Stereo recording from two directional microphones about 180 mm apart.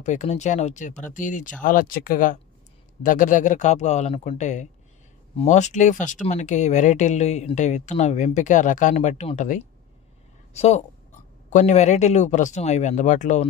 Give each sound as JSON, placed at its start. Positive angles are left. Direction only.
{"t": 0.0, "sound": "a woman's voice", "side_deg": 40}